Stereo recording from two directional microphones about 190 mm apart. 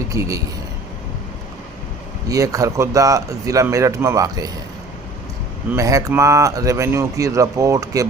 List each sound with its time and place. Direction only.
0.1 s speech: 15° right (ahead or behind)
2.3 s speech: 15° right (ahead or behind)
5.7 s speech: 15° right (ahead or behind)